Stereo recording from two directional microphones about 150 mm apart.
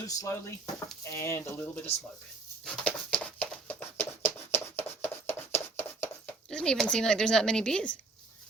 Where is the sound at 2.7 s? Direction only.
5° left (ahead or behind).